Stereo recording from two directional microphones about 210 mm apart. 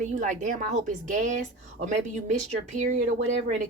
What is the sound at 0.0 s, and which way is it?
Speech, 35° right (ahead or behind).